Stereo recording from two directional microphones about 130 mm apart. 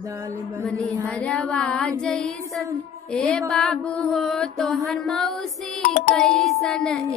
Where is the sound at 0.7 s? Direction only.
5° left (ahead or behind).